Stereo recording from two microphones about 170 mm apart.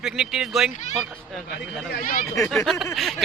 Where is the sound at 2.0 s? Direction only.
55° left (ahead or behind).